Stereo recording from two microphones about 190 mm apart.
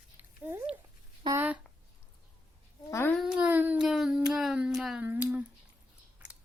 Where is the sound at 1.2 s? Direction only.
10° right (ahead or behind).